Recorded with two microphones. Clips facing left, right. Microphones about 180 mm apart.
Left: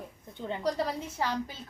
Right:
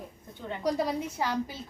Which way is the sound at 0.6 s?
10° right (ahead or behind).